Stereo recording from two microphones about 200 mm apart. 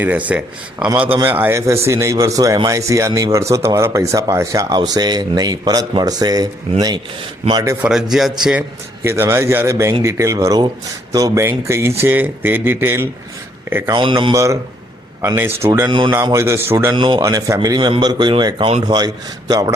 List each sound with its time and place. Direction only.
0.0 s speech: 10° right (ahead or behind)
8.1 s a man's voice: centre (ahead or behind)
13.9 s a man's voice: 25° right (ahead or behind)
15.9 s a man's voice: 20° right (ahead or behind)